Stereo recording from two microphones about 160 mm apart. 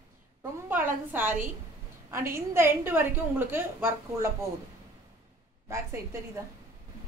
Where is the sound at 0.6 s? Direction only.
10° right (ahead or behind).